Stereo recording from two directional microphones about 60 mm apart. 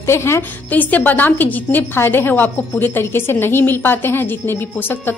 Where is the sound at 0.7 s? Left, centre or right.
Left.